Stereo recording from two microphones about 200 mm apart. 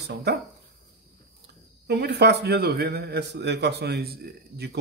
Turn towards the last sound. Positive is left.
turn(degrees=-50)  # may be behind; listen again after turning